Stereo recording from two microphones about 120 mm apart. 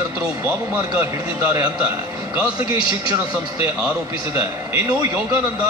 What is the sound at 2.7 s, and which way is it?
Speech, 35° right (ahead or behind).